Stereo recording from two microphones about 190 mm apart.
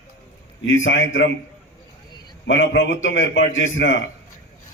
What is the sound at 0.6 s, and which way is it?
Speech, 80° left.